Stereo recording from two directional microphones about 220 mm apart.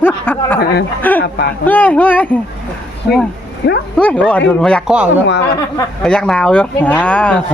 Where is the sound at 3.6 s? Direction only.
45° left (ahead or behind).